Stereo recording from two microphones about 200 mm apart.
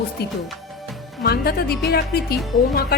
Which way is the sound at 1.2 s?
50° left (ahead or behind).